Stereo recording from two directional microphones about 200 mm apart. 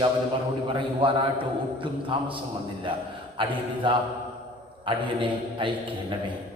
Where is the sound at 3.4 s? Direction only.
25° right (ahead or behind).